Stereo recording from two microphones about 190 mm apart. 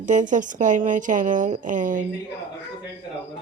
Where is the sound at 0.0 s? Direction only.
40° right (ahead or behind).